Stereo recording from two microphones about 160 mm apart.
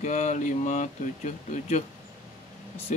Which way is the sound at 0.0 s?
45° left (ahead or behind).